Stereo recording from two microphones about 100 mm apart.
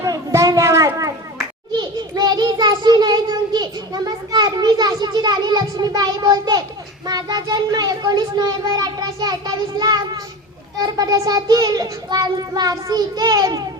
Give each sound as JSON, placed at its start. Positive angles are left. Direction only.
{"t": 0.0, "sound": "a sound", "side_deg": -30}
{"t": 1.7, "sound": "child singing", "side_deg": -45}
{"t": 7.0, "sound": "a child's voice", "side_deg": -40}